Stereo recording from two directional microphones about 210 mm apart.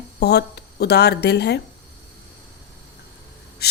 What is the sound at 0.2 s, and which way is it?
A woman's voice, 50° left (ahead or behind).